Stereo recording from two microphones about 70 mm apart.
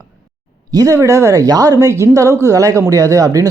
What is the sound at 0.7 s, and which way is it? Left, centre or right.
Speech, right.